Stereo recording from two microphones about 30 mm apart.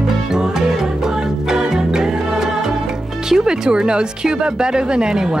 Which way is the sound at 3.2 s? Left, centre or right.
Right.